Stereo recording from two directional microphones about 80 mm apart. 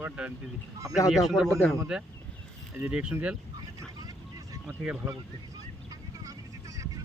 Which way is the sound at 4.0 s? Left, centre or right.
Right.